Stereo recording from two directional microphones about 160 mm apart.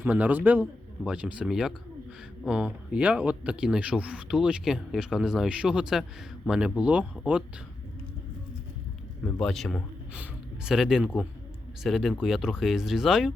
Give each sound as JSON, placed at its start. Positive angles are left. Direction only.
{"t": 0.0, "sound": "a man's voice", "side_deg": -10}
{"t": 9.2, "sound": "a man's voice", "side_deg": 5}